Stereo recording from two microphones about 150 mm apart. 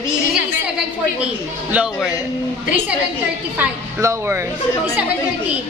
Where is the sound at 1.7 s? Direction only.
5° right (ahead or behind).